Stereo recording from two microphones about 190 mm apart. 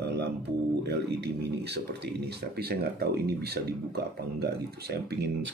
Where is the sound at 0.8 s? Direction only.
60° right (ahead or behind).